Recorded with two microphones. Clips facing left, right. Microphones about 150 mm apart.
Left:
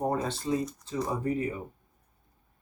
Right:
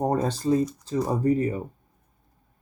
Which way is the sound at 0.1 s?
40° right (ahead or behind).